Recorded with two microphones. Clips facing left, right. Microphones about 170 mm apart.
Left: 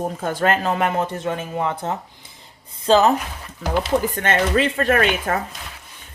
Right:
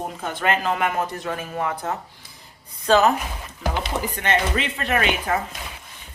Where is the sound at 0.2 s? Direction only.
45° left (ahead or behind).